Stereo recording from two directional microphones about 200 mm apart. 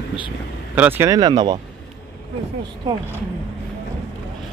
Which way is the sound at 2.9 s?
20° right (ahead or behind).